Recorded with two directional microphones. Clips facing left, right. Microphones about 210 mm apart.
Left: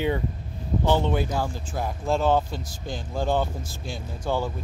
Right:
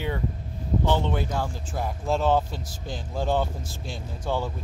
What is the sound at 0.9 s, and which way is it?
Speech, 5° left (ahead or behind).